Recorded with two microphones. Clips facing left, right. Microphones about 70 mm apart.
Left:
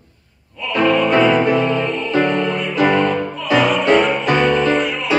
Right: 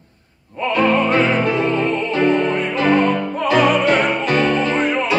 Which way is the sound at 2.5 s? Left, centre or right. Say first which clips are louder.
Right 1 dB; right.